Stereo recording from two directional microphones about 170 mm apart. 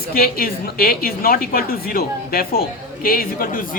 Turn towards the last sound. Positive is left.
turn(degrees=60)  # may be behind; listen again after turning